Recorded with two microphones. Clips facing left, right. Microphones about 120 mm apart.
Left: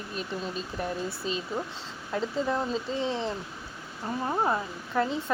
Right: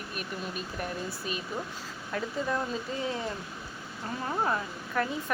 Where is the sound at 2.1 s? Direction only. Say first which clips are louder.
Left 3 dB; 25° left (ahead or behind).